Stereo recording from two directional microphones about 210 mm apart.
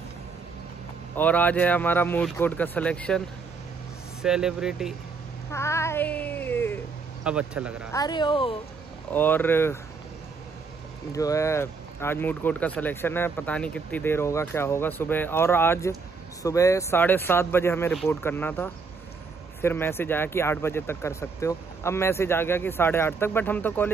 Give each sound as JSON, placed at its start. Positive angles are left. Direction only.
{"t": 1.1, "sound": "speech", "side_deg": 5}
{"t": 4.2, "sound": "speech", "side_deg": -5}
{"t": 5.5, "sound": "speech", "side_deg": 15}
{"t": 7.2, "sound": "speech", "side_deg": -5}
{"t": 7.9, "sound": "speech", "side_deg": 20}
{"t": 9.1, "sound": "speech", "side_deg": 10}
{"t": 11.1, "sound": "speech", "side_deg": 15}